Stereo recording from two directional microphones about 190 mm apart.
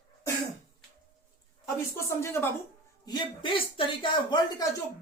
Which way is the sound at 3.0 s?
25° left (ahead or behind).